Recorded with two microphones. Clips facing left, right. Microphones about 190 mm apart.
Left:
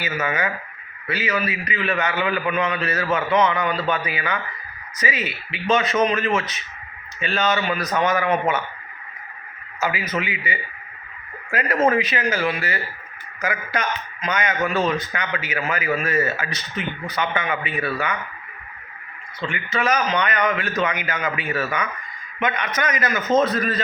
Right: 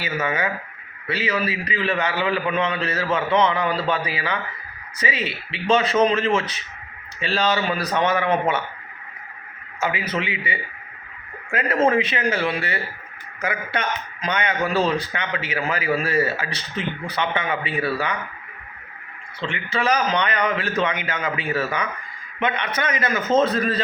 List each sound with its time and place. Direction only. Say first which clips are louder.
0.0 s a man's voice: even; 30° right (ahead or behind)
9.8 s a man's voice: even; 30° right (ahead or behind)
11.9 s a man's voice: even; 30° right (ahead or behind)
19.4 s a man's voice: even; 25° right (ahead or behind)